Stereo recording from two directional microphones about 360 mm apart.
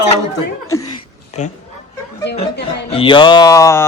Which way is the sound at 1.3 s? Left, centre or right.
Centre.